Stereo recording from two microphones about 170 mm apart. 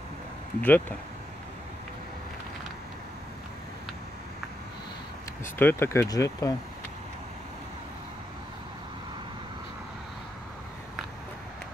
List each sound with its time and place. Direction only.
0.6 s speech: 10° left (ahead or behind)
5.4 s speech: 15° left (ahead or behind)